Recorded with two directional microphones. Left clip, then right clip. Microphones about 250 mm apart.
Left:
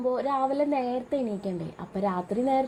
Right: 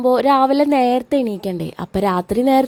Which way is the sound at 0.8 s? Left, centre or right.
Right.